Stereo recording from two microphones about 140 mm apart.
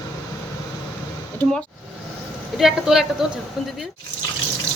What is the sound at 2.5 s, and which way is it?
Speech, centre (ahead or behind).